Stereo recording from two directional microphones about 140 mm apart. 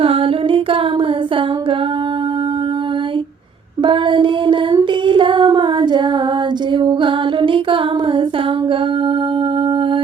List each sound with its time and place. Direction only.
0.0 s humming: 40° right (ahead or behind)
3.8 s a sound: 35° right (ahead or behind)
6.7 s music: 35° right (ahead or behind)